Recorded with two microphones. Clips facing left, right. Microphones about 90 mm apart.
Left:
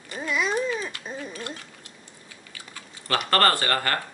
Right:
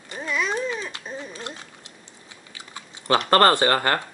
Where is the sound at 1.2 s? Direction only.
20° right (ahead or behind).